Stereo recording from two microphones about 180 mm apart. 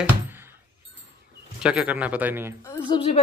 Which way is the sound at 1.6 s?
5° right (ahead or behind).